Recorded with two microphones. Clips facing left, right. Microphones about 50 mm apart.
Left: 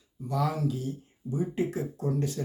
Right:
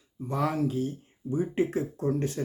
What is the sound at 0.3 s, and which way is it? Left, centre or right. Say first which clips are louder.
Speech: right 1 dB; right.